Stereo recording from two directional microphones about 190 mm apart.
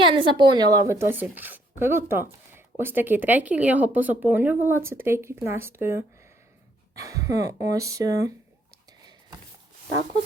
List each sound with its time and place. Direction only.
0.0 s a woman's voice: 25° right (ahead or behind)